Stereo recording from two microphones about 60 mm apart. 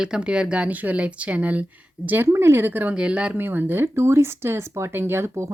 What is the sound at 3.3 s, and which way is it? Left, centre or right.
Speech, right.